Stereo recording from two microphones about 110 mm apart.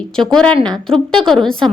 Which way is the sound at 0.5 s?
40° right (ahead or behind).